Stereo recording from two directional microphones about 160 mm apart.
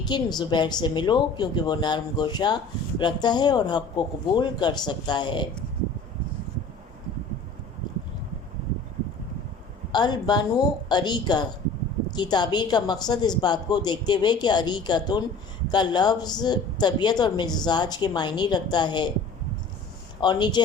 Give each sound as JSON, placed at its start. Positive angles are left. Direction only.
{"t": 0.1, "sound": "a woman's voice", "side_deg": 25}
{"t": 9.9, "sound": "a woman's voice", "side_deg": 25}
{"t": 20.2, "sound": "a woman's voice", "side_deg": 30}